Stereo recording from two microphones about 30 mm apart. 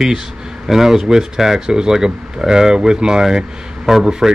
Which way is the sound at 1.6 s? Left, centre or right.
Right.